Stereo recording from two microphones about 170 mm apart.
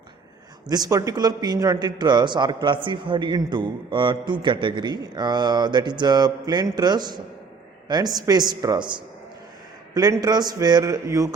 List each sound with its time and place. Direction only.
0.7 s a man's voice: 20° right (ahead or behind)